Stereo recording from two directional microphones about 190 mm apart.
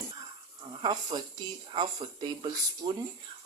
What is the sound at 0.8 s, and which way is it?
Speech, 20° right (ahead or behind).